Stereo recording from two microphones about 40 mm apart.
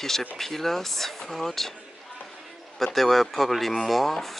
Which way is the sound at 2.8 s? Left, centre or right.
Centre.